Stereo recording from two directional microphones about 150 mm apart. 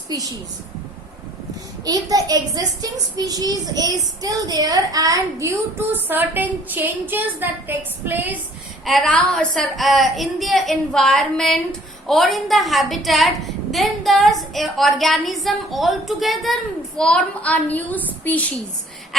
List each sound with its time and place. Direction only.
0.1 s a child's voice: 25° right (ahead or behind)
1.8 s a child's voice: 25° right (ahead or behind)
8.8 s a woman's voice: centre (ahead or behind)